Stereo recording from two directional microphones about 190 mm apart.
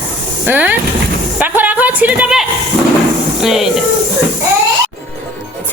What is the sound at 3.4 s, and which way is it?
Speech, centre (ahead or behind).